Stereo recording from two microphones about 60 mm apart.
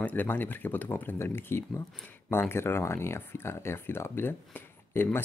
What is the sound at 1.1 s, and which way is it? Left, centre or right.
Speech, left.